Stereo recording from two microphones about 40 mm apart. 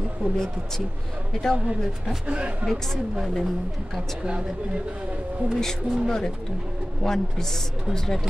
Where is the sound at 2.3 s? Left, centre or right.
Right.